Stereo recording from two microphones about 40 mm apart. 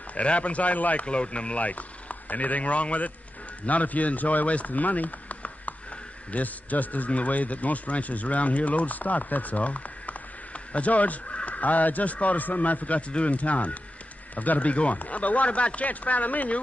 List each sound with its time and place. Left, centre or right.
0.1 s speech: left
1.0 s a man's voice: left